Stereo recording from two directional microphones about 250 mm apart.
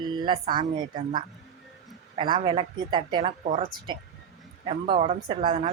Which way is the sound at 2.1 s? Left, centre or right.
Right.